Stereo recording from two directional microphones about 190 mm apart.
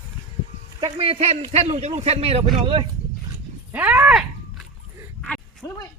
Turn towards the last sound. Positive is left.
turn(degrees=5)  # may be behind; listen again after turning